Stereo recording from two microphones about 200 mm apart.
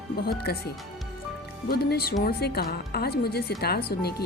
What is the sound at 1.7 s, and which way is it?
Speech, 50° left (ahead or behind).